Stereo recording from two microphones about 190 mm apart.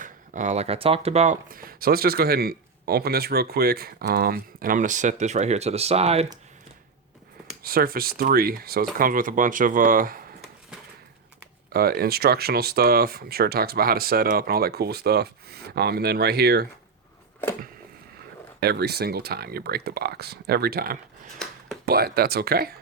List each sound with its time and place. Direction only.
0.0 s speech: 40° right (ahead or behind)
7.6 s speech: 50° right (ahead or behind)
11.7 s speech: 55° right (ahead or behind)
18.6 s speech: 55° right (ahead or behind)